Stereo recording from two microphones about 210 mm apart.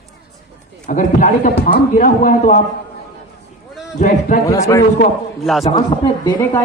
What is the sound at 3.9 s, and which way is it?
Speech, 35° left (ahead or behind).